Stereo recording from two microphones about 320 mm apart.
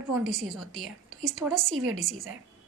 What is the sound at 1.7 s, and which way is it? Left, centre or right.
Speech, right.